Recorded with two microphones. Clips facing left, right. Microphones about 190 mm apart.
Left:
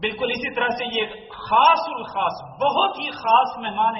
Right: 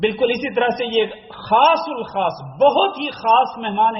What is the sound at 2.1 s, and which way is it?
A man's voice, 30° right (ahead or behind).